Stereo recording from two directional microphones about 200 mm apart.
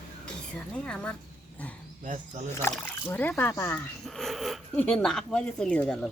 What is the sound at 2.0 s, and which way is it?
Speech, 35° right (ahead or behind).